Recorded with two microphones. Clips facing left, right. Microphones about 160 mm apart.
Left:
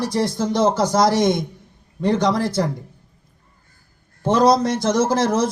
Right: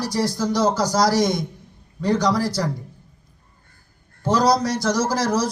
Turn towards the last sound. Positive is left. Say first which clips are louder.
# left 3 dB
turn(degrees=25)  # may be behind; listen again after turning